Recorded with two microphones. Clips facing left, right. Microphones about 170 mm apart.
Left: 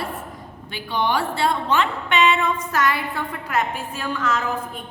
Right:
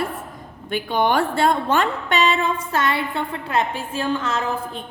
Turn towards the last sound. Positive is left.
turn(degrees=-30)  # may be behind; listen again after turning